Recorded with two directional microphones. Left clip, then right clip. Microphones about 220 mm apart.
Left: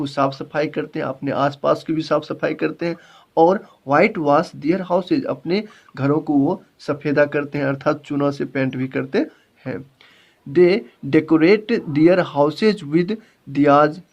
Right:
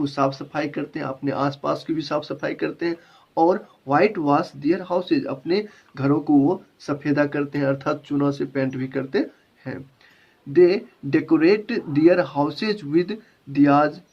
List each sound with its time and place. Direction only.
0.0 s speech: 50° left (ahead or behind)